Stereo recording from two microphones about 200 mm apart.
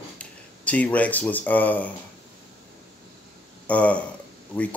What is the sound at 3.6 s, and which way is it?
Speech, 5° left (ahead or behind).